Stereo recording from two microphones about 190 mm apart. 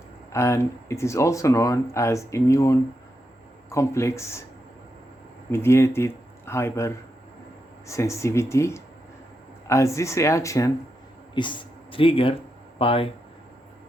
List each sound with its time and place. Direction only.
0.3 s speech: 15° left (ahead or behind)
5.5 s speech: 15° left (ahead or behind); by 13.1 s 30° left (ahead or behind)